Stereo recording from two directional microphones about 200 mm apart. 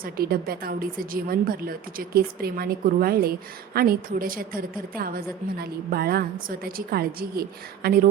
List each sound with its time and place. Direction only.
0.0 s a woman's voice: 50° right (ahead or behind)